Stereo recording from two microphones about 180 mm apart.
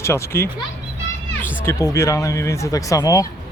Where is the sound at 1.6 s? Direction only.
15° left (ahead or behind).